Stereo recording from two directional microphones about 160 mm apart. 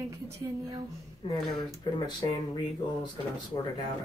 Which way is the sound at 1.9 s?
25° left (ahead or behind).